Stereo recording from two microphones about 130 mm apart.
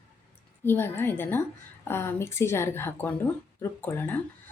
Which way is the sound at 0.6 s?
15° left (ahead or behind).